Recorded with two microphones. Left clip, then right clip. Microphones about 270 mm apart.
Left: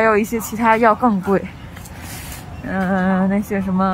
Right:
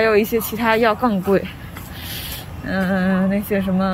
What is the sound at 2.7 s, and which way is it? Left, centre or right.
Speech, centre.